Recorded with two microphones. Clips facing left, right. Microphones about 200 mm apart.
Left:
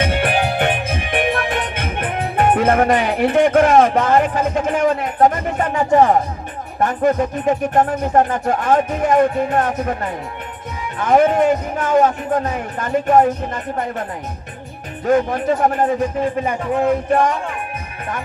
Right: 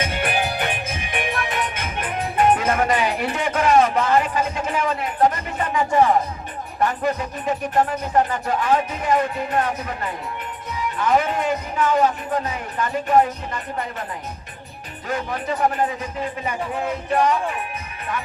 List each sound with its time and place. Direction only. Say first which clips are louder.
0.0 s music: left 5 dB; 60° left (ahead or behind)
6.7 s speech: left 6 dB; 50° left (ahead or behind)
15.0 s speech: left 10 dB; 50° left (ahead or behind)